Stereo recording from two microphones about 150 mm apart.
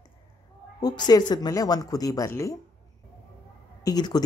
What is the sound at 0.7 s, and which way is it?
Speech, 25° left (ahead or behind).